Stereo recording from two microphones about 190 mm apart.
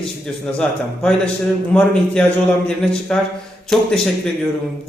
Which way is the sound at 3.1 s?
5° left (ahead or behind).